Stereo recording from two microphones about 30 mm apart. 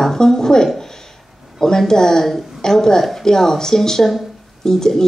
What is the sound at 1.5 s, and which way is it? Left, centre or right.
A woman's voice, centre.